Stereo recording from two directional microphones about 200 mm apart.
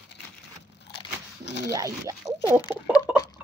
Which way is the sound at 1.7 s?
15° right (ahead or behind).